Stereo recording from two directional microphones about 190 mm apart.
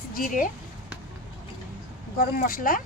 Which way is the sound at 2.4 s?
45° left (ahead or behind).